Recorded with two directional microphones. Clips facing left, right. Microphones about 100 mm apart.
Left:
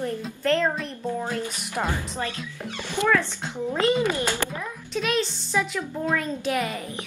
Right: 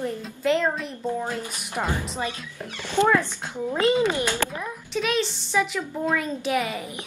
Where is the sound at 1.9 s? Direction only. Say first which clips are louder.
Right 1 dB; 15° right (ahead or behind).